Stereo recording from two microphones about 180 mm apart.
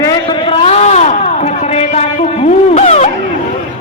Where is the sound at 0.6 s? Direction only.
35° left (ahead or behind).